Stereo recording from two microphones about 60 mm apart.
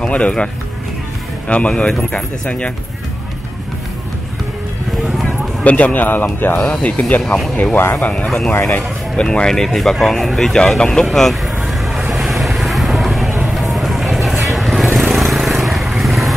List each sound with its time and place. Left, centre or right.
0.1 s speech: centre
1.5 s speech: centre
5.6 s speech: left; by 11.5 s centre
11.6 s vehicle: centre